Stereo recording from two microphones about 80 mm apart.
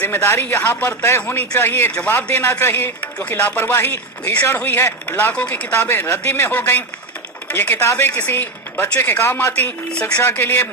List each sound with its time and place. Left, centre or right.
0.0 s speech: left
3.0 s speech: centre
5.0 s speech: left
5.7 s speech: left
6.5 s speech: left
9.9 s speech: centre
10.2 s speech: left